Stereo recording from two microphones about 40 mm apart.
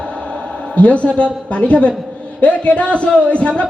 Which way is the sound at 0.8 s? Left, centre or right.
Left.